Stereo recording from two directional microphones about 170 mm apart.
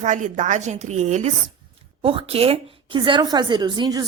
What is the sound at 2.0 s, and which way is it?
A woman's voice, 30° right (ahead or behind).